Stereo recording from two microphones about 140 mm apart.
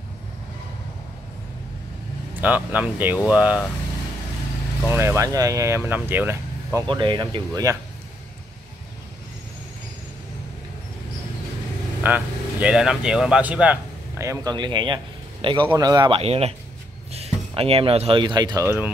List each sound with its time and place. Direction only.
2.4 s speech: 10° right (ahead or behind)
4.8 s speech: 15° right (ahead or behind)
6.9 s speech: 35° right (ahead or behind)
12.0 s speech: 10° right (ahead or behind)
14.2 s speech: 25° right (ahead or behind)
16.1 s speech: 45° right (ahead or behind); by 18.9 s 20° right (ahead or behind)